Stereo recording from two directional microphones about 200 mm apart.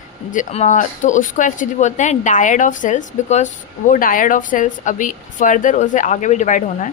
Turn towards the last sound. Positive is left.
turn(degrees=35)  # may be behind; listen again after turning